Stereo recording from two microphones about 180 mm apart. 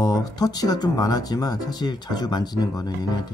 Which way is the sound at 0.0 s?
20° left (ahead or behind).